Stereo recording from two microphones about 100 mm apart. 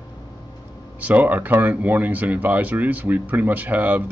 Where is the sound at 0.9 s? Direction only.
15° right (ahead or behind).